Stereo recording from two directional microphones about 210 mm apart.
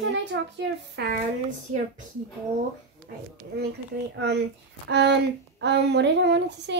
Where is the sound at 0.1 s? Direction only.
55° right (ahead or behind).